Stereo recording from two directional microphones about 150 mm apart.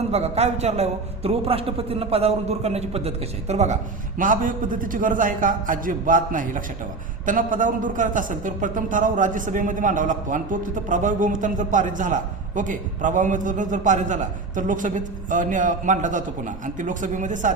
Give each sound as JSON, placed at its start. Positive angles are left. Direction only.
{"t": 0.1, "sound": "a man's voice", "side_deg": -45}
{"t": 4.2, "sound": "a man's voice", "side_deg": -65}